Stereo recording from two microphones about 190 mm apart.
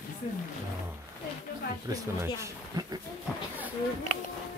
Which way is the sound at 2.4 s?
20° right (ahead or behind).